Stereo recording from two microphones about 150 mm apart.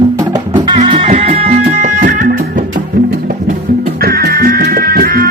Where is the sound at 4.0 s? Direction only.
90° right.